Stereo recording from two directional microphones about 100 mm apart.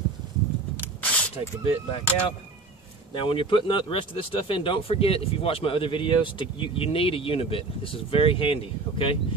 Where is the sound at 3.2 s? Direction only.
60° left (ahead or behind).